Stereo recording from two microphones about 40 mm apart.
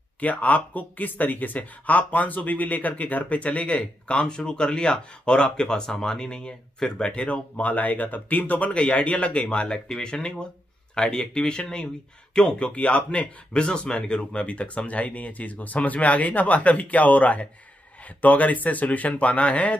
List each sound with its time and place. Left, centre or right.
0.2 s speech: left